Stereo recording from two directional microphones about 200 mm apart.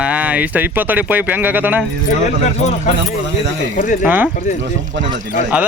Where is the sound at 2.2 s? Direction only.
35° left (ahead or behind).